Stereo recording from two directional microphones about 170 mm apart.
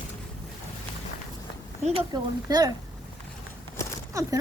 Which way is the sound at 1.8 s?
30° right (ahead or behind).